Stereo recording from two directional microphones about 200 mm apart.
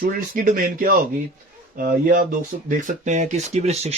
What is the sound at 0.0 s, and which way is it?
Speech, 40° right (ahead or behind).